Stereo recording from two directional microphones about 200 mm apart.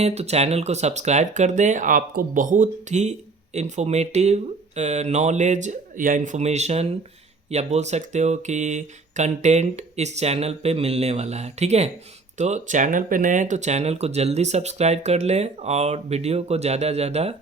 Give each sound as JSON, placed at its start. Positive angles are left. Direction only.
{"t": 0.0, "sound": "speech", "side_deg": -30}